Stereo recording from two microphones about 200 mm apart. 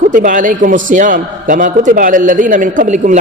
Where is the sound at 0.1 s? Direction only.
40° right (ahead or behind).